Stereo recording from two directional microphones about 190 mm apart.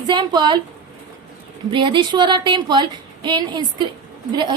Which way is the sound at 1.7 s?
25° right (ahead or behind).